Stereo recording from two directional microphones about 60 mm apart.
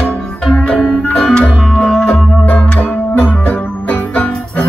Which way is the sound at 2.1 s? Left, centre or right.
Left.